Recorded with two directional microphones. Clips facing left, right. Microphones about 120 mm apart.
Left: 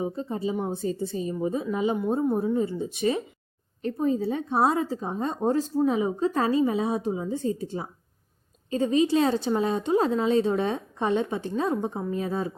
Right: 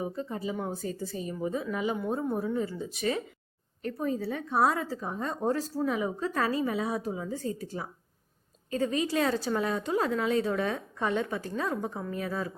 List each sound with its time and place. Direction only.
0.0 s a woman's voice: 25° left (ahead or behind)